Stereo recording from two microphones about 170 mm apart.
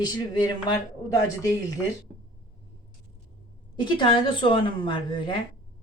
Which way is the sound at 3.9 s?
30° left (ahead or behind).